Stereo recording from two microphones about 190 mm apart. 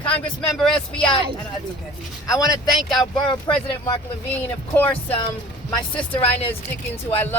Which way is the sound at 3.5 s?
25° left (ahead or behind).